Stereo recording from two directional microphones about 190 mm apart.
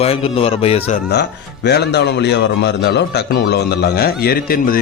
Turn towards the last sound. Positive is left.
turn(degrees=50)  # may be behind; listen again after turning